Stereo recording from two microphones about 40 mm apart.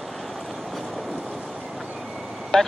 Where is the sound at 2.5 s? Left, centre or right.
Centre.